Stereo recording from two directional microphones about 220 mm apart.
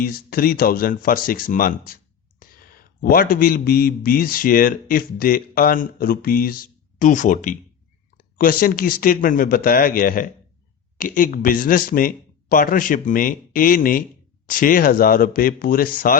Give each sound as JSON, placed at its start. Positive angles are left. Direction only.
{"t": 0.0, "sound": "a man's voice", "side_deg": 45}